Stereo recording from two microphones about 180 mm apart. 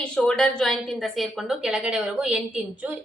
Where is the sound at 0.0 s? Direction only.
5° left (ahead or behind).